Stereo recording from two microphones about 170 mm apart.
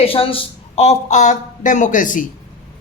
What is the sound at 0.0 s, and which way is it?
Speech, 35° left (ahead or behind).